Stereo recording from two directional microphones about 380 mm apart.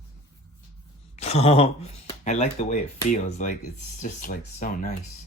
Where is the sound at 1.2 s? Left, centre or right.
Centre.